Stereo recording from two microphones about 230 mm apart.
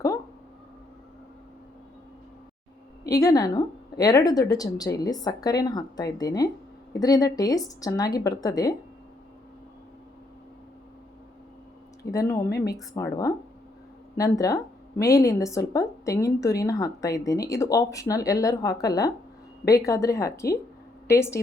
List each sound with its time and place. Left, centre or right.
3.1 s a woman's voice: centre
12.0 s a woman's voice: centre